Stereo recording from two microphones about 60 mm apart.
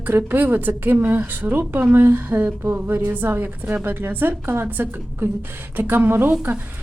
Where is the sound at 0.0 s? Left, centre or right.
Right.